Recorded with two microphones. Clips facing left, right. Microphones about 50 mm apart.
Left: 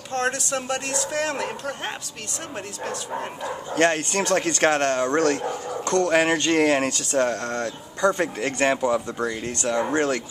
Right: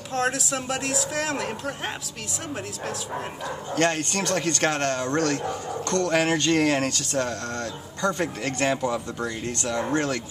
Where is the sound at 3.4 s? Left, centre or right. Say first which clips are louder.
Left 3 dB; left.